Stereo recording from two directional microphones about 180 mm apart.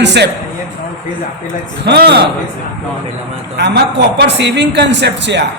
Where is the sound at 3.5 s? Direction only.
65° right (ahead or behind).